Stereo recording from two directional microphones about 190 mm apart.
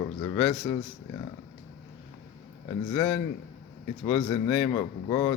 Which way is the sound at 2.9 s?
15° left (ahead or behind).